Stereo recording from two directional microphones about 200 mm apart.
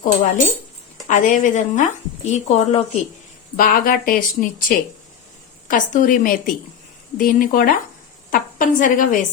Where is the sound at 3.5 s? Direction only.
45° left (ahead or behind).